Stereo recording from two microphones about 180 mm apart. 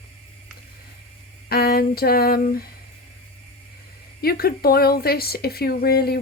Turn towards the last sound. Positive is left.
turn(degrees=60)  # may be behind; listen again after turning